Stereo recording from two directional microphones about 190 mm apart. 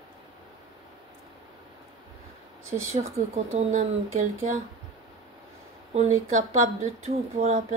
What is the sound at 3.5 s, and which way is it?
Speech, 35° right (ahead or behind).